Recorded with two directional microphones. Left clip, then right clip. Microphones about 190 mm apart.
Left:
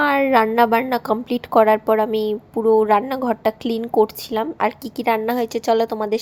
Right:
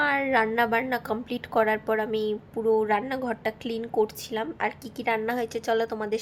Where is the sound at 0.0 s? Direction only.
30° left (ahead or behind).